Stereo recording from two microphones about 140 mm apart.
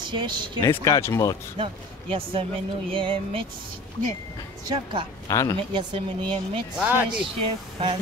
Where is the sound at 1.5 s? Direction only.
40° right (ahead or behind).